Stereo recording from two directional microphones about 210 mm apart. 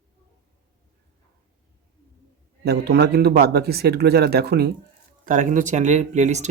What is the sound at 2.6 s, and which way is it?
Speech, 50° right (ahead or behind).